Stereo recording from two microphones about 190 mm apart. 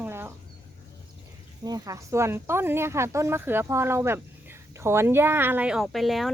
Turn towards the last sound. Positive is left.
turn(degrees=0)  # may be behind; listen again after turning